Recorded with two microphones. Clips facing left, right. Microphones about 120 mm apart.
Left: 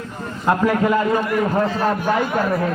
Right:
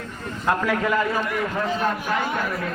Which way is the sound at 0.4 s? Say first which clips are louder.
Left 5 dB; 40° left (ahead or behind).